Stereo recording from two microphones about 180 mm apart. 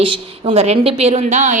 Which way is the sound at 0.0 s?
35° right (ahead or behind).